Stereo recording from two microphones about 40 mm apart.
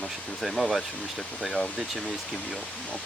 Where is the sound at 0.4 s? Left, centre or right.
Centre.